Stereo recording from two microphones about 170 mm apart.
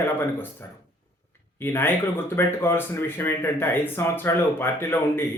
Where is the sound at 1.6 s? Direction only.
10° left (ahead or behind).